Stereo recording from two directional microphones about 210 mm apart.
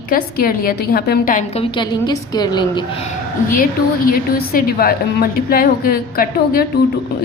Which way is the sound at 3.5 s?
45° left (ahead or behind).